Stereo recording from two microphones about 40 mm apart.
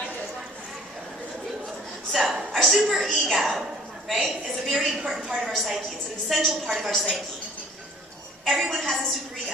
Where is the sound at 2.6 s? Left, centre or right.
Centre.